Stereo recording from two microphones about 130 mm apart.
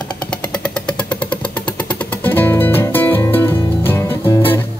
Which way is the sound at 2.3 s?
15° left (ahead or behind).